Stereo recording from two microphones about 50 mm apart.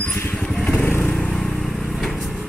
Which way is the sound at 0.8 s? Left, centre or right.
Left.